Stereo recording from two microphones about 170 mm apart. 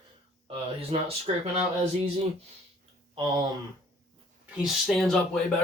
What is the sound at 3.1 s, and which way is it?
Speech, 25° right (ahead or behind).